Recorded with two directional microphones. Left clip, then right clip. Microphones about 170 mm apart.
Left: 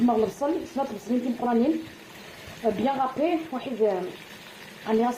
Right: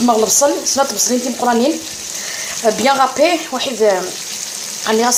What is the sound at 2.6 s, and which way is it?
Speech, 15° right (ahead or behind).